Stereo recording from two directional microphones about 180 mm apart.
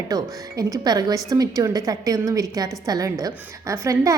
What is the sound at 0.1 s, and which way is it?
A woman's voice, 20° right (ahead or behind).